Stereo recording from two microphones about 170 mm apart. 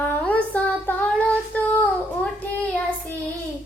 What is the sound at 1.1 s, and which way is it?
Child singing, 10° left (ahead or behind).